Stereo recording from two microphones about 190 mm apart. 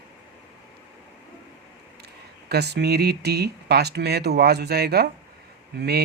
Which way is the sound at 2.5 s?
60° right (ahead or behind).